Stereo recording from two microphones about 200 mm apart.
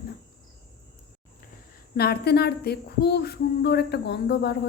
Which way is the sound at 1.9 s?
50° left (ahead or behind).